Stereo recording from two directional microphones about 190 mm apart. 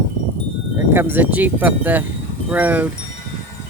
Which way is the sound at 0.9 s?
10° right (ahead or behind).